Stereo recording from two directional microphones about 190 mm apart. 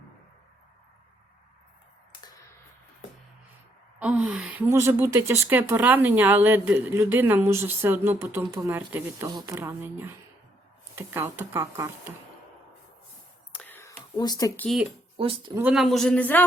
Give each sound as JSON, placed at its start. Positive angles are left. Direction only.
{"t": 4.0, "sound": "speech", "side_deg": -5}
{"t": 13.5, "sound": "whispering", "side_deg": 10}
{"t": 14.2, "sound": "speech", "side_deg": 20}
{"t": 15.2, "sound": "speech", "side_deg": -30}
{"t": 15.5, "sound": "a man's voice", "side_deg": -5}